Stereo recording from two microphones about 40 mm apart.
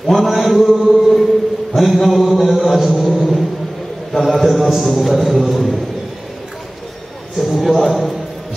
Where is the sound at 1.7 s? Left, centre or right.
Centre.